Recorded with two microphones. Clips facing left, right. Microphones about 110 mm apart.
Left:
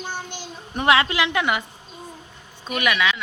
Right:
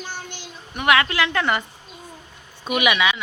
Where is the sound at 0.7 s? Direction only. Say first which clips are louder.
Even; 30° left (ahead or behind).